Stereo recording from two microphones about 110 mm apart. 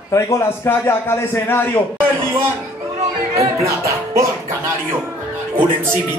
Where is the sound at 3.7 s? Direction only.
25° right (ahead or behind).